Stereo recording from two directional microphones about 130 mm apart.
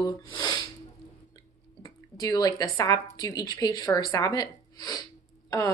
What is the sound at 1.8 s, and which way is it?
A woman's voice, 30° left (ahead or behind).